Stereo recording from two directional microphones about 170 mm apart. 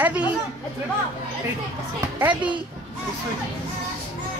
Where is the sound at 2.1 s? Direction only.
10° right (ahead or behind).